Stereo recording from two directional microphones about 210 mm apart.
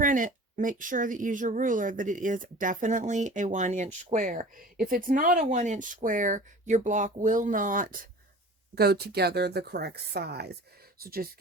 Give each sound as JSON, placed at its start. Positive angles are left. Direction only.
{"t": 0.0, "sound": "a woman's voice", "side_deg": -40}